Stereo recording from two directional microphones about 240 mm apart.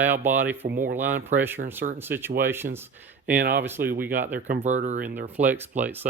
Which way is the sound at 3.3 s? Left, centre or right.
Right.